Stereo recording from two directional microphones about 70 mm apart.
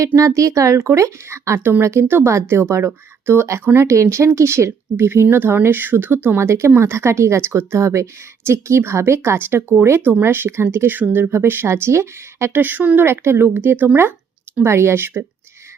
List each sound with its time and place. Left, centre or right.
0.2 s speech: right
12.5 s speech: right
13.1 s speech: right